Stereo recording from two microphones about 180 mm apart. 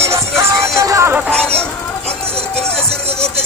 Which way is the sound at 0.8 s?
15° right (ahead or behind).